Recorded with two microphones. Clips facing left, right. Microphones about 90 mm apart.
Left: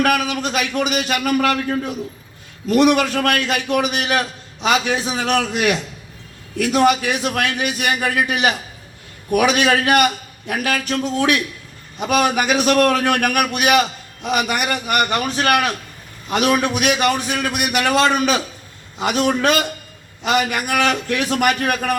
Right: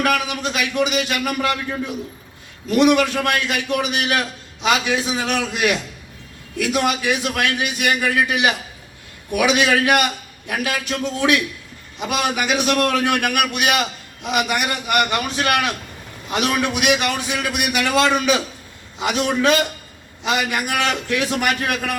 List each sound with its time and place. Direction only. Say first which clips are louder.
0.0 s a man's voice: left 2 dB; 40° left (ahead or behind)
2.6 s a man's voice: left 1 dB; 40° left (ahead or behind)